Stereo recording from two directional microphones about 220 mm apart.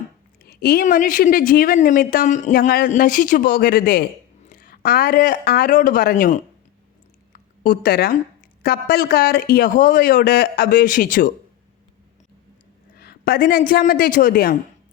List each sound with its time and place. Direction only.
0.4 s a woman's voice: 45° left (ahead or behind)
13.0 s a woman's voice: 45° left (ahead or behind)